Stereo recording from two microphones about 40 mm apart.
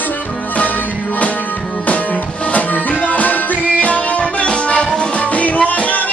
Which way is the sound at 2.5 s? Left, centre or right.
Left.